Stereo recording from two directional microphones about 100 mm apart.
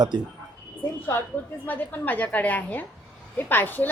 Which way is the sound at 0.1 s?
50° right (ahead or behind).